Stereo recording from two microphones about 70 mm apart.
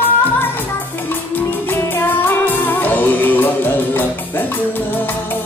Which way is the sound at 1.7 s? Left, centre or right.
Left.